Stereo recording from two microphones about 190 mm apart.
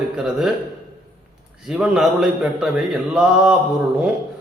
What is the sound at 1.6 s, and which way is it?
A man's voice, 5° right (ahead or behind).